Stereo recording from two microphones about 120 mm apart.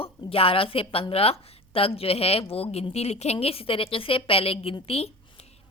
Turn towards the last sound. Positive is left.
turn(degrees=55)  # may be behind; listen again after turning